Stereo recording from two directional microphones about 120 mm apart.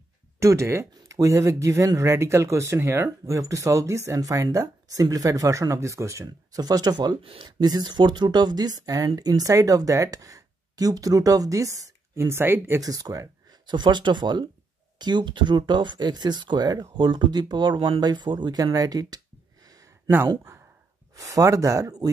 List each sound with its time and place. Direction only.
0.4 s speech: 25° right (ahead or behind)
7.2 s speech: 45° right (ahead or behind); by 22.1 s 30° right (ahead or behind)